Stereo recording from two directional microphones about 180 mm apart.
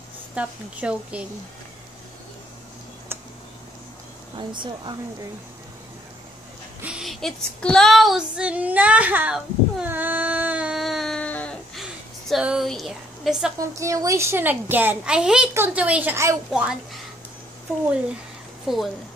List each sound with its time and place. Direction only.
0.3 s a child's voice: 5° right (ahead or behind)
4.4 s speech: 25° right (ahead or behind)
6.8 s female singing: 5° right (ahead or behind)
13.6 s a child's voice: 15° right (ahead or behind)
18.7 s speech: centre (ahead or behind)